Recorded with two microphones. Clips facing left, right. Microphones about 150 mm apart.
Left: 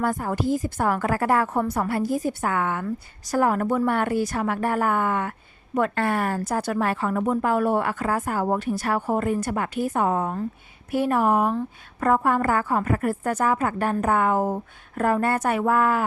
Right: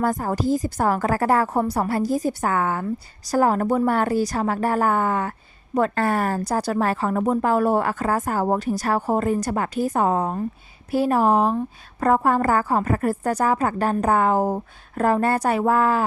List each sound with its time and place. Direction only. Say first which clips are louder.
0.0 s a woman's voice: right 2 dB; 40° right (ahead or behind)